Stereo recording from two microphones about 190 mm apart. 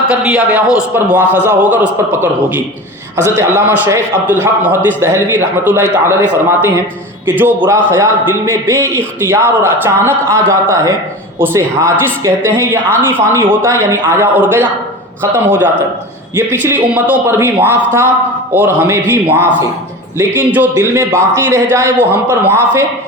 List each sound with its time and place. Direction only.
0.1 s a man's voice: 5° right (ahead or behind)
16.3 s a man's voice: 15° right (ahead or behind)